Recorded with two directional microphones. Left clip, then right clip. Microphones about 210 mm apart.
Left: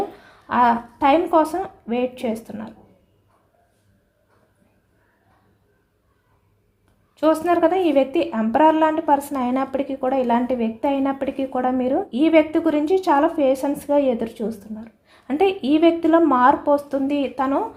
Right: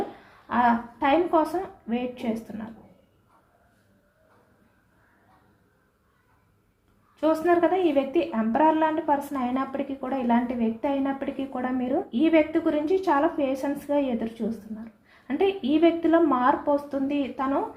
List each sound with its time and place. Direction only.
0.4 s a woman's voice: 45° left (ahead or behind)
7.2 s a woman's voice: 45° left (ahead or behind)